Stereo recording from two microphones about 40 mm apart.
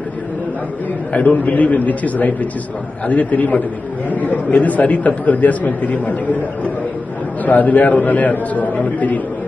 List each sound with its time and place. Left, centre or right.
1.1 s a man's voice: left